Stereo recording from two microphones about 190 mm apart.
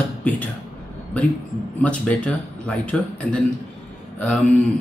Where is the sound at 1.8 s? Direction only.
5° left (ahead or behind).